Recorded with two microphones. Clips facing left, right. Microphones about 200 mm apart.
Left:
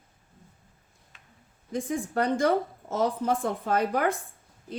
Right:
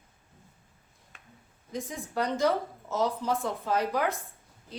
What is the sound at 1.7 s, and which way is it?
Speech, 55° left (ahead or behind).